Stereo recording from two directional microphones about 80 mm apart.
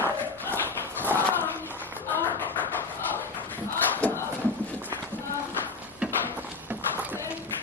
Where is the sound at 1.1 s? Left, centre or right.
Left.